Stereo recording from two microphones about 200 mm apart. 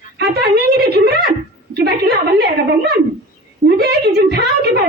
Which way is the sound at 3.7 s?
50° right (ahead or behind).